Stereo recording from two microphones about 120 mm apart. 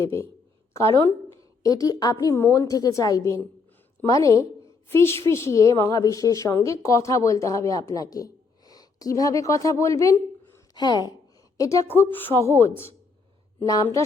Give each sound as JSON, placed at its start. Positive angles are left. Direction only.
{"t": 0.0, "sound": "a woman's voice", "side_deg": 25}
{"t": 11.9, "sound": "a woman's voice", "side_deg": 15}